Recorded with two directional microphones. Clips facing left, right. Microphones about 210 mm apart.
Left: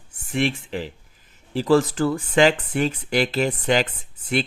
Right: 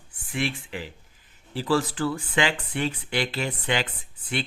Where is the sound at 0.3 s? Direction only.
40° left (ahead or behind).